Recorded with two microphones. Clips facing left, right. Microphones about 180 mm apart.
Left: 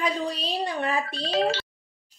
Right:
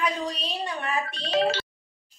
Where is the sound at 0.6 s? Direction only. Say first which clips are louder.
Left 2 dB; 35° left (ahead or behind).